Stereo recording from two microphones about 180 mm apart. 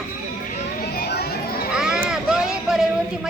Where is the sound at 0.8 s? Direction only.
60° left (ahead or behind).